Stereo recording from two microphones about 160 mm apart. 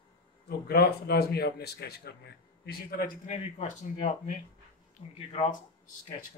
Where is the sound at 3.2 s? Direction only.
45° left (ahead or behind).